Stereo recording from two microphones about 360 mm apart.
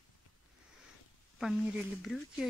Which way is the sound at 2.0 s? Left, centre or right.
Centre.